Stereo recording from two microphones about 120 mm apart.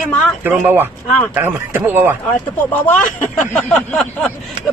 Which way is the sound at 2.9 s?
15° left (ahead or behind).